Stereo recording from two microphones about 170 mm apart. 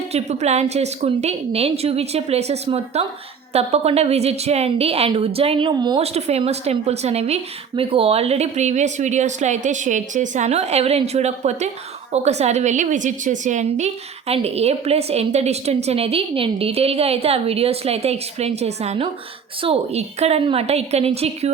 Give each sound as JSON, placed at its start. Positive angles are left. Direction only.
{"t": 0.1, "sound": "a woman's voice", "side_deg": -40}
{"t": 6.0, "sound": "a woman's voice", "side_deg": -40}